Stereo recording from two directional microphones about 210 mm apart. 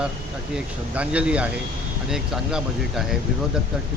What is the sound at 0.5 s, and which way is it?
Speech, 5° right (ahead or behind).